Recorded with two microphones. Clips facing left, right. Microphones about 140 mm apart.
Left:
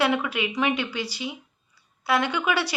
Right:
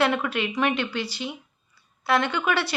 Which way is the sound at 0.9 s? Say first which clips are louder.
Right 1 dB; 55° right (ahead or behind).